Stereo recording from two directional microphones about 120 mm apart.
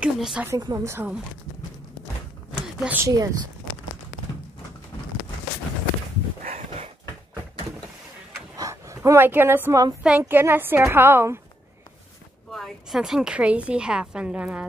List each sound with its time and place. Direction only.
0.0 s a woman's voice: 5° right (ahead or behind)
0.6 s a woman's voice: 35° right (ahead or behind)
0.8 s a woman's voice: 20° right (ahead or behind)
2.8 s a woman's voice: 15° right (ahead or behind)
3.1 s a woman's voice: 30° right (ahead or behind)
6.4 s a sound: 65° right (ahead or behind)
8.5 s speech: 25° right (ahead or behind)
10.0 s a woman's voice: 15° right (ahead or behind)
12.5 s a woman's voice: centre (ahead or behind)